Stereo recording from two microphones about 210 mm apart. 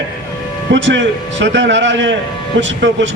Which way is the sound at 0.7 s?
60° right (ahead or behind).